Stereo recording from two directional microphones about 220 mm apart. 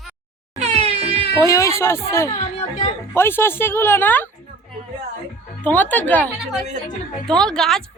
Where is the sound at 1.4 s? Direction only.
15° left (ahead or behind).